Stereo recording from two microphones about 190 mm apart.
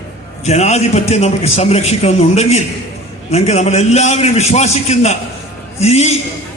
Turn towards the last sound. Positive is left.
turn(degrees=35)  # may be behind; listen again after turning